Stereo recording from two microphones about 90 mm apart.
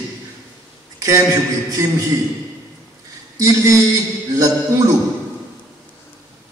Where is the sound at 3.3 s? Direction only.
35° right (ahead or behind).